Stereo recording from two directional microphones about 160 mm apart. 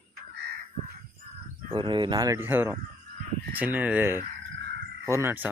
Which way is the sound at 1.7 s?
30° right (ahead or behind).